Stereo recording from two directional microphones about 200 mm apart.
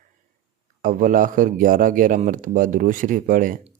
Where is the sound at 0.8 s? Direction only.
40° right (ahead or behind).